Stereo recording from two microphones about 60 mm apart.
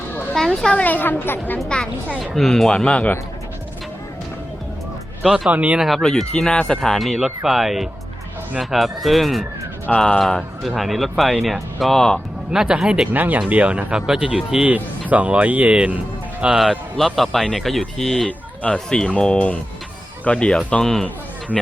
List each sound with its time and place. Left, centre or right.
0.3 s speech: centre
0.7 s a woman's voice: left
1.5 s speech: centre
5.2 s speech: centre
5.5 s speech: right
6.0 s speech: centre
9.9 s speech: centre
10.2 s speech: centre
12.5 s speech: centre
13.1 s speech: right; by 14.7 s centre
15.1 s speech: right
17.2 s speech: centre
18.3 s a sound: left
18.9 s speech: centre